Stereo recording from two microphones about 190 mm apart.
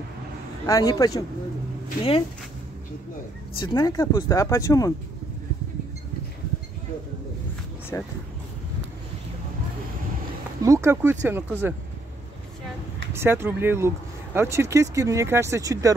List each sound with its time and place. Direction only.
0.7 s speech: 20° left (ahead or behind)
3.5 s speech: 25° left (ahead or behind)
7.9 s speech: 10° left (ahead or behind)
10.6 s speech: 15° right (ahead or behind)
13.1 s speech: 10° right (ahead or behind)